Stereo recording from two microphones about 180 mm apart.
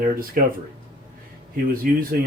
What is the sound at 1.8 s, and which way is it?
Speech, 50° right (ahead or behind).